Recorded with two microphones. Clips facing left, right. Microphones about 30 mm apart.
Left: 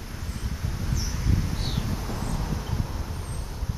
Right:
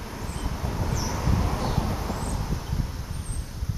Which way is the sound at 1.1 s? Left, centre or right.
Right.